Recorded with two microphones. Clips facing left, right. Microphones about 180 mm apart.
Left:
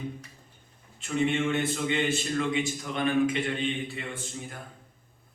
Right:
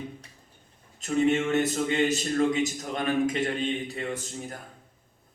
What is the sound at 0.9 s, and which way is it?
A man's voice, 40° right (ahead or behind).